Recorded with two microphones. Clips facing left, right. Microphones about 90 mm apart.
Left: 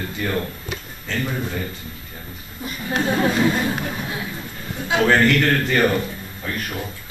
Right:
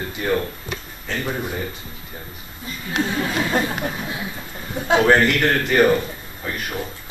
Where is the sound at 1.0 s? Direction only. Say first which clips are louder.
Even; 15° right (ahead or behind).